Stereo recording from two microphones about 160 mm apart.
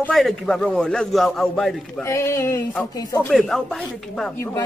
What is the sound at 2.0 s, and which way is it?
Speech, 20° left (ahead or behind).